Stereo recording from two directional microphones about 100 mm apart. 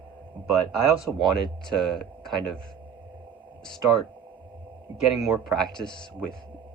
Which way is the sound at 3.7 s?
Centre (ahead or behind).